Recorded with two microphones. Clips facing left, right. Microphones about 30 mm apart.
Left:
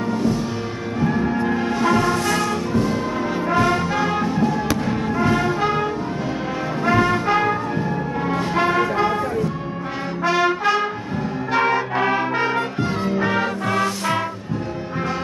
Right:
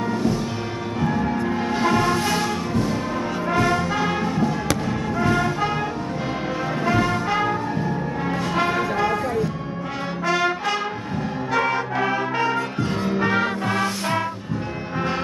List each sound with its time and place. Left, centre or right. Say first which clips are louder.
0.1 s music: left 2 dB; centre
2.1 s music: left 2 dB; centre
2.7 s music: left 4 dB; centre
3.4 s brass instrument: left 2 dB; centre
3.9 s music: left 2 dB; centre
4.6 s music: left 2 dB; centre
6.9 s brass instrument: left 4 dB; centre
8.3 s music: left 3 dB; centre
10.2 s music: left 4 dB; left
13.2 s music: right 1 dB; centre